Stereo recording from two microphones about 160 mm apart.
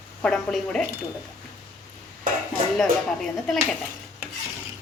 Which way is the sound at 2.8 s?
5° left (ahead or behind).